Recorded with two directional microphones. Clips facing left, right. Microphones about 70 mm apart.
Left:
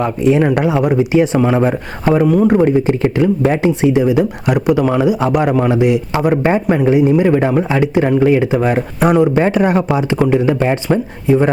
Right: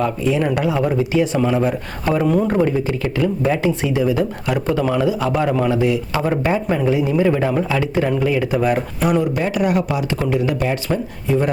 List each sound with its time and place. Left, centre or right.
0.0 s speech: left
2.2 s speech: centre
2.5 s speech: left